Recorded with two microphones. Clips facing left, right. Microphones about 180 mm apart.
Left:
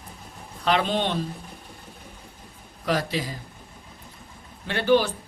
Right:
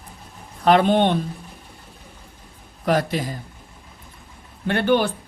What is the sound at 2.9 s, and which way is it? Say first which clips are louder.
Speech: right 5 dB; 50° right (ahead or behind).